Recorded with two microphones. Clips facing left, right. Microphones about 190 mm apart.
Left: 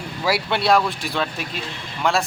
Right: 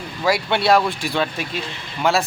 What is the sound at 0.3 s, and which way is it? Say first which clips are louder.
Speech: right 2 dB; 5° left (ahead or behind).